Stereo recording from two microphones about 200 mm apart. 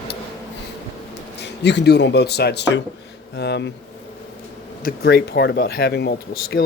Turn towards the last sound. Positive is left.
turn(degrees=55)  # may be behind; listen again after turning